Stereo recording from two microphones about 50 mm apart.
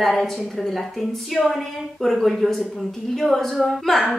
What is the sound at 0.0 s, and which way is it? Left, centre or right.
Speech, centre.